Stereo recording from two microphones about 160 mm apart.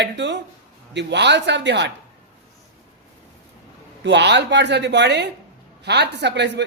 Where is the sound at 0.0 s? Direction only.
90° right.